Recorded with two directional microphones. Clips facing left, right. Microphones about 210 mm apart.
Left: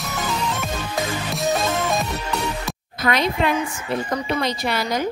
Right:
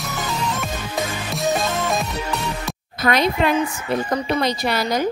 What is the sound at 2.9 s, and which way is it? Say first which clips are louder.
A woman's voice: right 2 dB; 40° right (ahead or behind).